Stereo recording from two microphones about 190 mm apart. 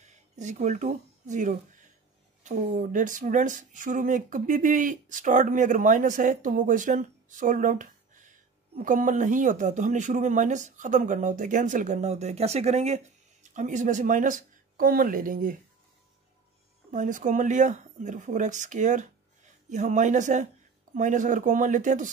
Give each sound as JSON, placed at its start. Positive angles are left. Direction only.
{"t": 0.4, "sound": "speech", "side_deg": -40}
{"t": 16.9, "sound": "speech", "side_deg": -40}